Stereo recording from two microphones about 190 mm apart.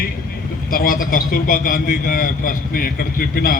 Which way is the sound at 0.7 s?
50° left (ahead or behind).